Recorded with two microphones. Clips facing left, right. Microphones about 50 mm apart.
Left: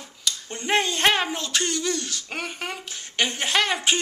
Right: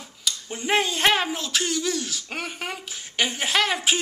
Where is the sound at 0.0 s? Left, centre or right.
Centre.